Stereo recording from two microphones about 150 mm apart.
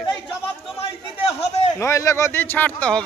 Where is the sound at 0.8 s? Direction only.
45° left (ahead or behind).